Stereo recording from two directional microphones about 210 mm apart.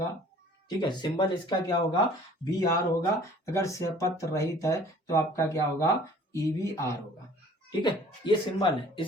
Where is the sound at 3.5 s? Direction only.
15° left (ahead or behind).